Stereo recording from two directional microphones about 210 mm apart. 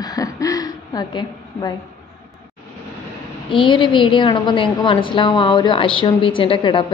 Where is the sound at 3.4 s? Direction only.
25° left (ahead or behind).